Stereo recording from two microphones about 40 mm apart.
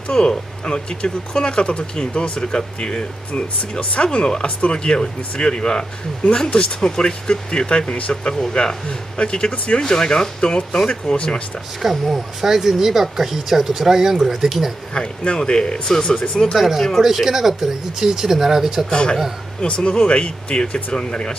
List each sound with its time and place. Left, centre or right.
0.1 s speech: centre
11.1 s speech: left
11.8 s speech: centre
15.0 s speech: left
16.5 s speech: centre
18.9 s speech: left